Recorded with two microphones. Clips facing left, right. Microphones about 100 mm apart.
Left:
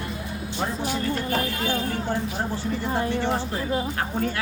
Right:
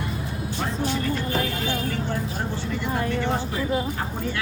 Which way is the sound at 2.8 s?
25° left (ahead or behind).